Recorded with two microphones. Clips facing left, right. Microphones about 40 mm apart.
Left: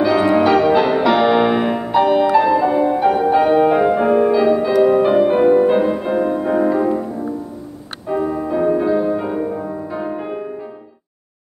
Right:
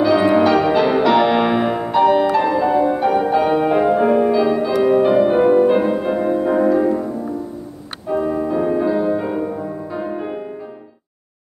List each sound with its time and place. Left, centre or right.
0.0 s music: centre
8.1 s music: left
8.7 s music: centre